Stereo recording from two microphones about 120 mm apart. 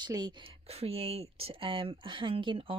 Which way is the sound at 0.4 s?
55° right (ahead or behind).